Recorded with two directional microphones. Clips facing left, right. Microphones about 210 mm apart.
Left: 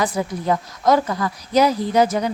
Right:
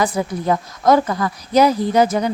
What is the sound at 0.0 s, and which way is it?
Speech, 55° right (ahead or behind).